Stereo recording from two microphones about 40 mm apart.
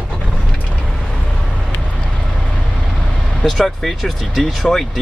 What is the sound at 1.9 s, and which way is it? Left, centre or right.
Vehicle, centre.